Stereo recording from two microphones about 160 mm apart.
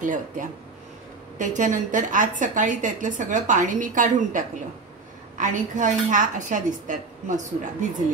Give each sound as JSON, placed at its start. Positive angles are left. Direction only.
{"t": 0.0, "sound": "a woman's voice", "side_deg": -55}